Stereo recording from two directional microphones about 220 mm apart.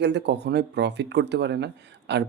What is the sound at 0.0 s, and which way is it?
Speech, 50° right (ahead or behind).